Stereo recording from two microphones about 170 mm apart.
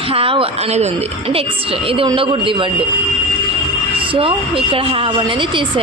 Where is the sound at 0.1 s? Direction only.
35° right (ahead or behind).